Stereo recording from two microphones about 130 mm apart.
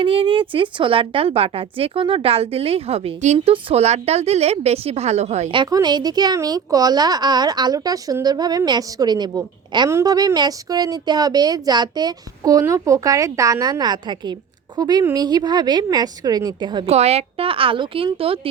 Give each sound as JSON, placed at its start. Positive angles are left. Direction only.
{"t": 0.0, "sound": "a woman's voice", "side_deg": -45}
{"t": 3.3, "sound": "a woman's voice", "side_deg": -45}
{"t": 5.7, "sound": "a woman's voice", "side_deg": -30}
{"t": 16.8, "sound": "a woman's voice", "side_deg": -55}